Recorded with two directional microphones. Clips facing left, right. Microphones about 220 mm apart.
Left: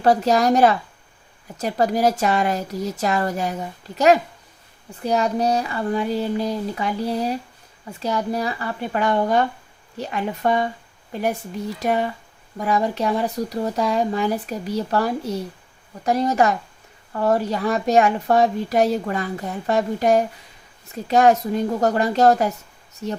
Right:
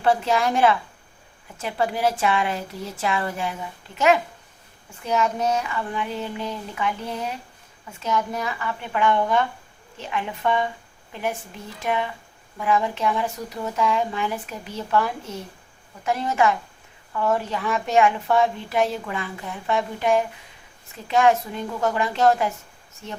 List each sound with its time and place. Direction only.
0.0 s a woman's voice: 40° left (ahead or behind)